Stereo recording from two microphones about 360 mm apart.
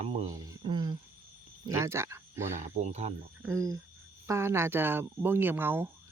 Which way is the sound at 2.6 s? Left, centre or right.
Centre.